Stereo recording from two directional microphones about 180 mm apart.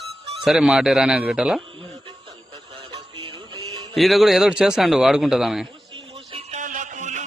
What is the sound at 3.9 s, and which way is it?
A man's voice, centre (ahead or behind).